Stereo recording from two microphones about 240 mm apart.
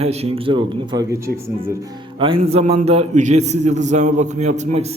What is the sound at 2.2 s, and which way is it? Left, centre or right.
A man's voice, right.